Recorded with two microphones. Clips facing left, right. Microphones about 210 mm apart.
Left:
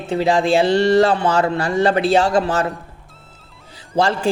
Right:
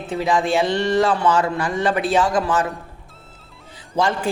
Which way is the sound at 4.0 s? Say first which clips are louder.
Left 3 dB; 30° left (ahead or behind).